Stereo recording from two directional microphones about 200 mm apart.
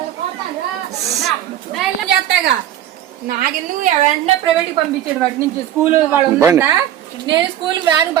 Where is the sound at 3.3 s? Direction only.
40° right (ahead or behind).